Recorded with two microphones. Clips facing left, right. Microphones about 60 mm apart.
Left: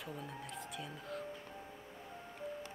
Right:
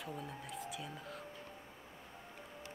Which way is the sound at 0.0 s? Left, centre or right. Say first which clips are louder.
Even; centre.